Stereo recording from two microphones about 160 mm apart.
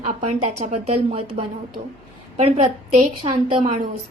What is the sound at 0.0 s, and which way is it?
A woman's voice, 45° right (ahead or behind).